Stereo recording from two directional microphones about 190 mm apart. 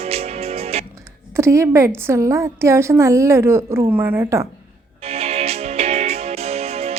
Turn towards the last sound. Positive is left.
turn(degrees=-30)  # may be behind; listen again after turning